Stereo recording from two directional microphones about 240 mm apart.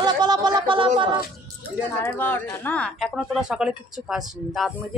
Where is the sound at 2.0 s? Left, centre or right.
Centre.